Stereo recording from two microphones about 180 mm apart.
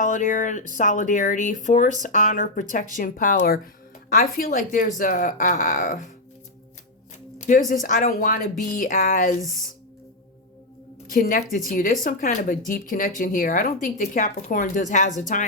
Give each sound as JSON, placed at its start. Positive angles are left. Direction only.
{"t": 0.0, "sound": "speech", "side_deg": 45}
{"t": 7.3, "sound": "a sound", "side_deg": 45}
{"t": 7.7, "sound": "speech", "side_deg": 45}
{"t": 11.1, "sound": "speech", "side_deg": 50}